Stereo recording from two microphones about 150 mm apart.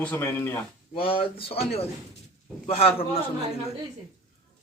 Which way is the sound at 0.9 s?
35° left (ahead or behind).